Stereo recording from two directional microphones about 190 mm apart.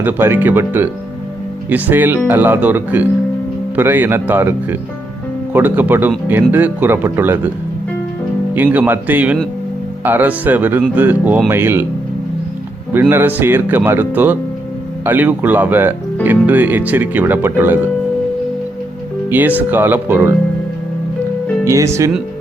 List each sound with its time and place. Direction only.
0.0 s speech: 10° right (ahead or behind)
8.5 s speech: 10° right (ahead or behind)
12.9 s speech: 10° right (ahead or behind)
19.3 s speech: 10° right (ahead or behind)
21.6 s speech: 15° right (ahead or behind)